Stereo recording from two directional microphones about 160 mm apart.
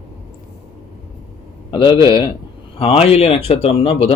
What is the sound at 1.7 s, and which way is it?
Speech, 30° left (ahead or behind).